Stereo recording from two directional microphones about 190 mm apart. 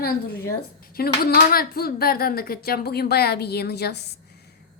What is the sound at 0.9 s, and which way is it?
A woman's voice, 50° left (ahead or behind).